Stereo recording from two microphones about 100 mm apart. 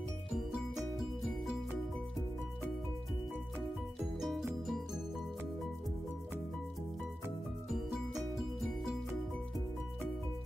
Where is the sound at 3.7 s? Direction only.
Centre (ahead or behind).